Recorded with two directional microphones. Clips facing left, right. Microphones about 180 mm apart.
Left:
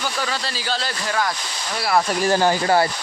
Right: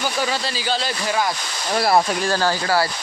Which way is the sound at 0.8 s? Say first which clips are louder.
Even; 15° right (ahead or behind).